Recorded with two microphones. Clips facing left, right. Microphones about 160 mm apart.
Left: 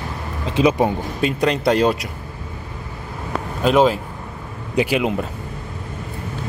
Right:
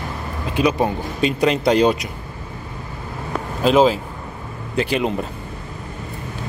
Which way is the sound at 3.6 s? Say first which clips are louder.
Right 1 dB; centre (ahead or behind).